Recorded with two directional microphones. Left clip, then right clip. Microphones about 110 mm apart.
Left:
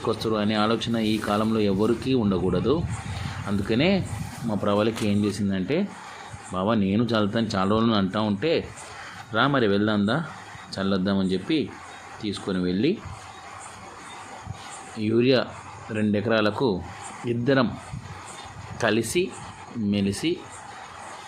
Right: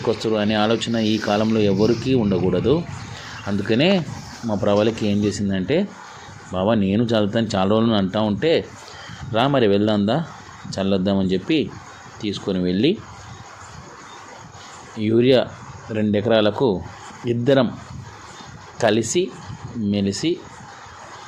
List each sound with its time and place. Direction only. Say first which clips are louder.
0.0 s speech: right 5 dB; 10° right (ahead or behind)
3.4 s speech: right 5 dB; 20° right (ahead or behind)
4.4 s speech: right 5 dB; 10° right (ahead or behind)
14.9 s speech: right 5 dB; 15° right (ahead or behind)
18.8 s speech: right 5 dB; 15° right (ahead or behind)